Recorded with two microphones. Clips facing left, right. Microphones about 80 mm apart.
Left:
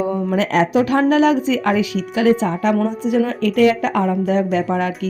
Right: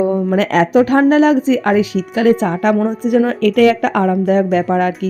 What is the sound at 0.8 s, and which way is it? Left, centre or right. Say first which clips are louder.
A woman's voice: right 5 dB; right.